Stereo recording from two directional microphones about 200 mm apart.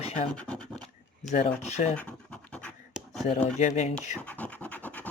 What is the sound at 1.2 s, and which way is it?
Speech, 35° left (ahead or behind).